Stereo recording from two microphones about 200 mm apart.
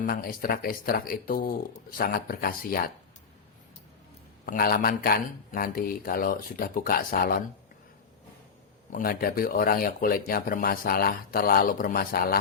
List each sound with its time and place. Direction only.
0.0 s speech: 45° left (ahead or behind)
4.4 s speech: 45° left (ahead or behind)
8.9 s speech: 45° left (ahead or behind)